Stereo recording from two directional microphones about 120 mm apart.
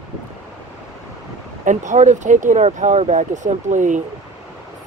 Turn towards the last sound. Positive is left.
turn(degrees=-90)